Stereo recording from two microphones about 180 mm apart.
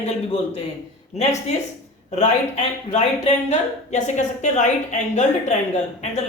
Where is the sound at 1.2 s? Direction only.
40° left (ahead or behind).